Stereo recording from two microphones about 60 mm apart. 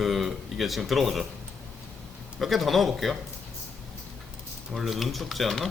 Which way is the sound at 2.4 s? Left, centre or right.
Centre.